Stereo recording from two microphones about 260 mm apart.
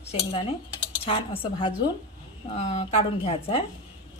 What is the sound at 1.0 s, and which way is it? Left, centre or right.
Speech, left.